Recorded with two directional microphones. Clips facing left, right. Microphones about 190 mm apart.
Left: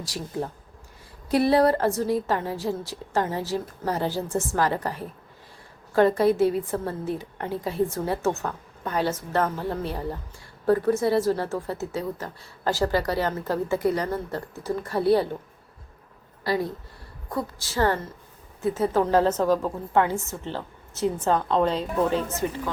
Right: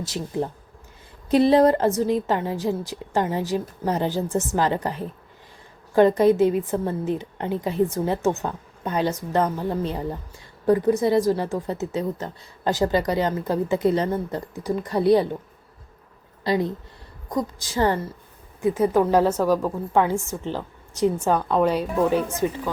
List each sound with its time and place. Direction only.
0.0 s a woman's voice: 20° right (ahead or behind)
16.4 s a woman's voice: 20° right (ahead or behind)